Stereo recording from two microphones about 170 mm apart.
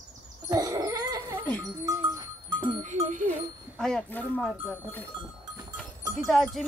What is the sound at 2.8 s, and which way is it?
Music, 45° right (ahead or behind).